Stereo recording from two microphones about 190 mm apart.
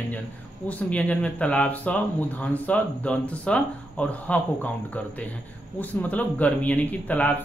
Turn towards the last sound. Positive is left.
turn(degrees=10)  # may be behind; listen again after turning